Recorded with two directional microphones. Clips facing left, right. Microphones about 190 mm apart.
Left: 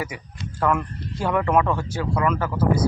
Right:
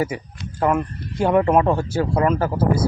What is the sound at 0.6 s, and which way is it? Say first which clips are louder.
Speech: right 3 dB; 25° right (ahead or behind).